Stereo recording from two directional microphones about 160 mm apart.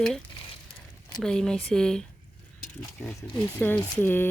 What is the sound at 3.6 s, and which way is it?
Speech, 10° left (ahead or behind).